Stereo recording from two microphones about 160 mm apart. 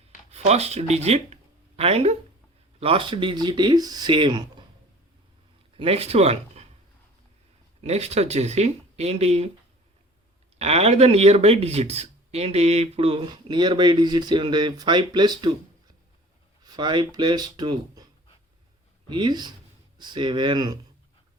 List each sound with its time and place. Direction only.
0.3 s speech: 40° right (ahead or behind)
5.7 s speech: 40° right (ahead or behind)
7.9 s speech: 40° right (ahead or behind)
10.6 s speech: 40° right (ahead or behind)
16.6 s speech: 25° right (ahead or behind)